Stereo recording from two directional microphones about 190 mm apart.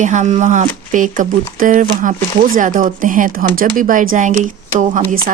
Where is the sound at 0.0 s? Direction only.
40° right (ahead or behind).